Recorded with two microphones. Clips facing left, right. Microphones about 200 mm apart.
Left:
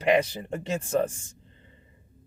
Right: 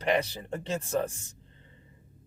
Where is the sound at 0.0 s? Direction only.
10° left (ahead or behind).